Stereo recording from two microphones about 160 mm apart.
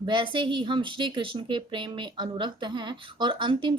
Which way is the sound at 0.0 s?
30° right (ahead or behind).